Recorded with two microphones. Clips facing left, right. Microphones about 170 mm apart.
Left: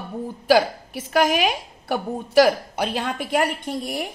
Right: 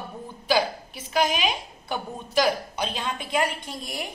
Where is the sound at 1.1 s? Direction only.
65° left (ahead or behind).